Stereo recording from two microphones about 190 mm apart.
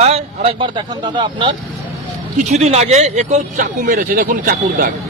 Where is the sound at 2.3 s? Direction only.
35° right (ahead or behind).